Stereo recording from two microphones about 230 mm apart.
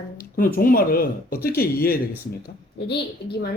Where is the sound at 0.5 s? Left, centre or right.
Left.